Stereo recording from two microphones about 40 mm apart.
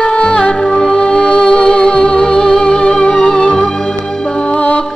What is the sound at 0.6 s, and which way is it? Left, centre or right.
Music, centre.